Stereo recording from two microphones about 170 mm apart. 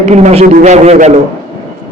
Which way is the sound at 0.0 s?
40° right (ahead or behind).